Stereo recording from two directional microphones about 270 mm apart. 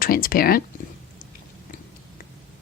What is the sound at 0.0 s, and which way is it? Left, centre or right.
Speech, left.